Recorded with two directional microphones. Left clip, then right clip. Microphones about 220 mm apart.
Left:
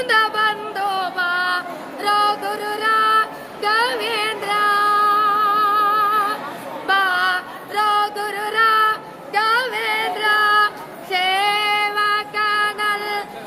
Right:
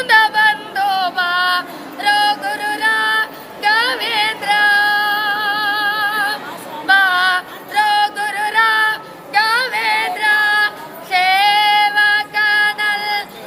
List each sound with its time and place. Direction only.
0.0 s music: 10° left (ahead or behind)
11.1 s female singing: 10° left (ahead or behind)